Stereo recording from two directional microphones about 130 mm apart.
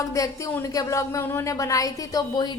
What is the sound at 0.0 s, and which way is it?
A woman's voice, 25° left (ahead or behind).